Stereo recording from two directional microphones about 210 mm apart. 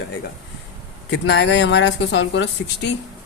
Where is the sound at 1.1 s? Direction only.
55° left (ahead or behind).